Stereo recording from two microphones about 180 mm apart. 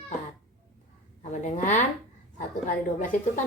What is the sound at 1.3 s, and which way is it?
Speech, 40° left (ahead or behind).